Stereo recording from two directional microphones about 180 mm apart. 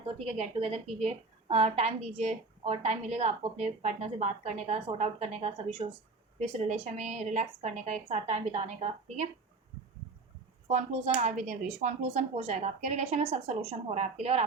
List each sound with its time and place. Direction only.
0.0 s a woman's voice: 35° right (ahead or behind)
10.7 s a woman's voice: 40° right (ahead or behind)